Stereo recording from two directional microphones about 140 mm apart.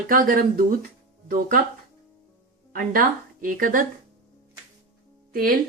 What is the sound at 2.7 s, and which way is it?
A woman's voice, 90° right.